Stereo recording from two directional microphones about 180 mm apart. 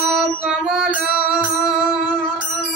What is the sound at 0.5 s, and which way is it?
Music, centre (ahead or behind).